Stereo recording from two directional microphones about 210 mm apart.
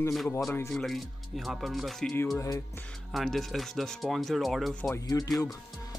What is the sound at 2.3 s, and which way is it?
Speech, 15° left (ahead or behind).